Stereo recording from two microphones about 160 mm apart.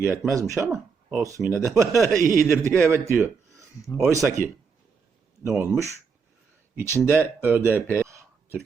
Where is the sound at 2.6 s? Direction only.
15° right (ahead or behind).